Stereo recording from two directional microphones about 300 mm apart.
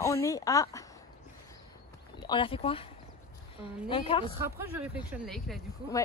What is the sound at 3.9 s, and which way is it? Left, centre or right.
Speech, centre.